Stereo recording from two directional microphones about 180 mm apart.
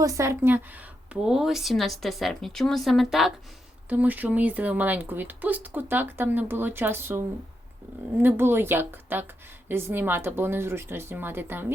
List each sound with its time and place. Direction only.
0.0 s speech: 15° right (ahead or behind)
1.1 s speech: 5° right (ahead or behind)
8.2 s speech: 10° right (ahead or behind)